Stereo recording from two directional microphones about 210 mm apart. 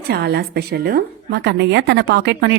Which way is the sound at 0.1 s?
50° right (ahead or behind).